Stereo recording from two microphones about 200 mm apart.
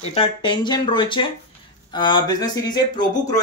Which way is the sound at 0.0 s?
30° left (ahead or behind).